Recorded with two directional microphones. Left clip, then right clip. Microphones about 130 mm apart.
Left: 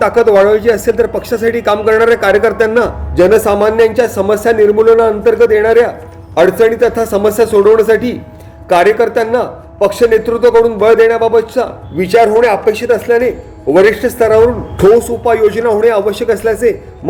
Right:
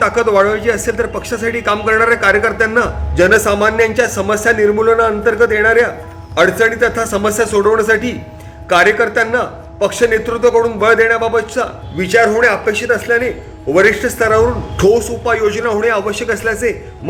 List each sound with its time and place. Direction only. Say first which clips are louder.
0.0 s a man's voice: left 4 dB; 30° left (ahead or behind)